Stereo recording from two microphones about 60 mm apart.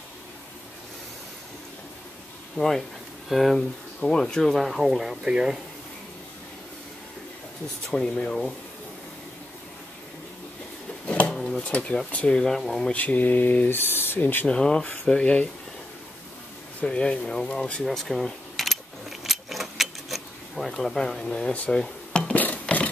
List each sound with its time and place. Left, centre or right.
2.5 s speech: centre
4.0 s speech: centre
7.9 s speech: centre
11.2 s drawer open or close: centre
11.6 s speech: left
12.4 s speech: centre
12.9 s speech: left
14.5 s speech: centre
16.8 s speech: centre
17.8 s keys jangling: centre
21.6 s a sound: centre
22.3 s a sound: left